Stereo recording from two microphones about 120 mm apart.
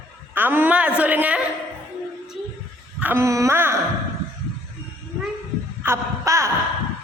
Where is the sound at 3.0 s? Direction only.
20° right (ahead or behind).